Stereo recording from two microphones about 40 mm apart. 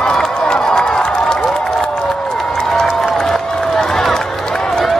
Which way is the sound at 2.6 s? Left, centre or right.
Centre.